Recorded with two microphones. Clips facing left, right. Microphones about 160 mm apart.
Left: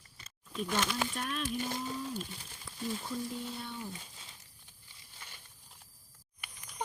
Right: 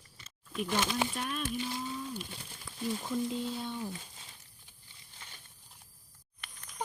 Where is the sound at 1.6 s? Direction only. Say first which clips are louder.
Even; 45° left (ahead or behind).